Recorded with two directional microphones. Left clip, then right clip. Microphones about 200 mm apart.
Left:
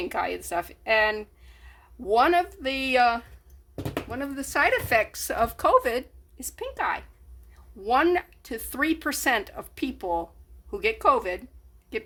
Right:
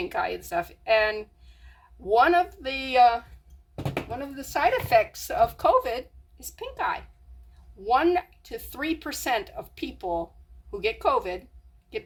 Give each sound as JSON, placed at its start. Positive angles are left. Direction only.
{"t": 0.0, "sound": "speech", "side_deg": 40}